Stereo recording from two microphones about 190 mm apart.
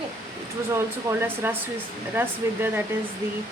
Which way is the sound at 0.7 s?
15° right (ahead or behind).